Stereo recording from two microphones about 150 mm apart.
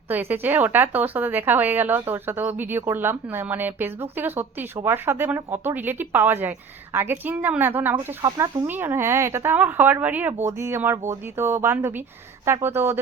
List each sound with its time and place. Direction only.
0.1 s a woman's voice: 10° right (ahead or behind)